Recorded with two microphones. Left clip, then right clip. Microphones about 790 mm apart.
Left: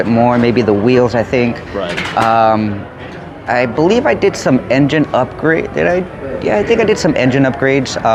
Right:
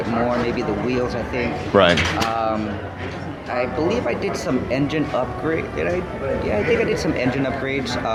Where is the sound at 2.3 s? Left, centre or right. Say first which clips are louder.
Left 11 dB; left.